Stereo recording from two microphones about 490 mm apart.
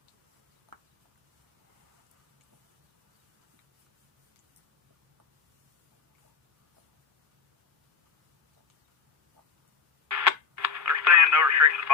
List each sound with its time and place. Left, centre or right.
10.1 s radio: right